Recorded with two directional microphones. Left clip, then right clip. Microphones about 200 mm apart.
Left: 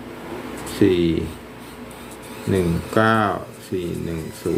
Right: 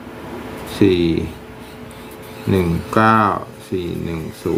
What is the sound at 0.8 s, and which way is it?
Speech, 20° right (ahead or behind).